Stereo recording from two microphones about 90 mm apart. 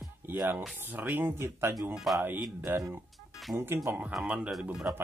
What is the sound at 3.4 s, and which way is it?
Speech, centre (ahead or behind).